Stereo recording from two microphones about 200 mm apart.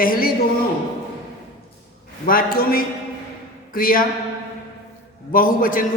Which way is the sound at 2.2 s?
45° left (ahead or behind).